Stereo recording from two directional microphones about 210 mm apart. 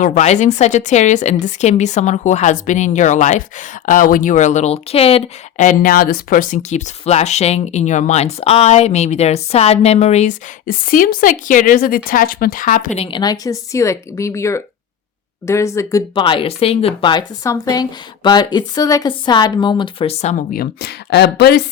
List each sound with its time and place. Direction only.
0.0 s speech: 35° left (ahead or behind)
13.1 s speech: 20° left (ahead or behind)
20.5 s speech: 45° left (ahead or behind)